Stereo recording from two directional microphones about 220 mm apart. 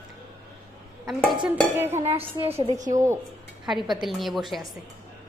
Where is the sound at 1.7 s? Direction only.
10° right (ahead or behind).